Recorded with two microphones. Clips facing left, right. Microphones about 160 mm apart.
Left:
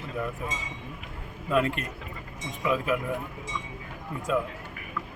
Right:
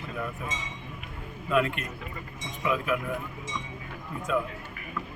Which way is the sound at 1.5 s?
35° left (ahead or behind).